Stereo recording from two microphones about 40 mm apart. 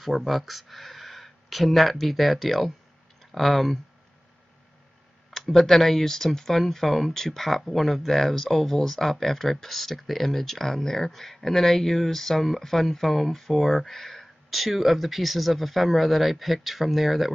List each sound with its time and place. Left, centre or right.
0.0 s speech: centre
5.3 s speech: centre